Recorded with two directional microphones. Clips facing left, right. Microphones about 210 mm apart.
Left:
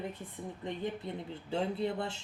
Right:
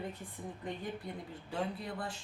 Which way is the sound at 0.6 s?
25° left (ahead or behind).